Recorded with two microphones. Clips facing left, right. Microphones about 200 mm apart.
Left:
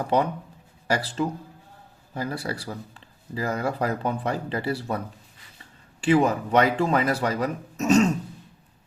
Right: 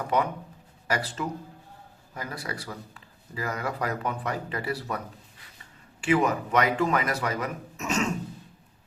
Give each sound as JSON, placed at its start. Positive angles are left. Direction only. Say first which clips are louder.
{"t": 0.0, "sound": "speech", "louder": "left 3 dB", "side_deg": 30}
{"t": 6.0, "sound": "speech", "louder": "left 4 dB", "side_deg": 30}